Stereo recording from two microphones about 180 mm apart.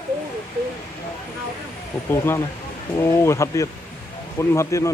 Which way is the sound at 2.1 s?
15° left (ahead or behind).